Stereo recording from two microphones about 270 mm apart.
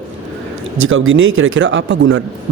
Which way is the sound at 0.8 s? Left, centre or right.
Right.